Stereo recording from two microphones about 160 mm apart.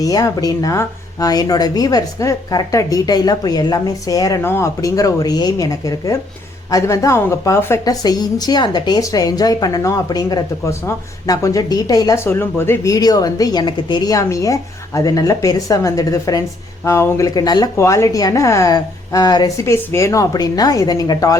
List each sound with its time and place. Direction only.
0.0 s a woman's voice: 25° left (ahead or behind)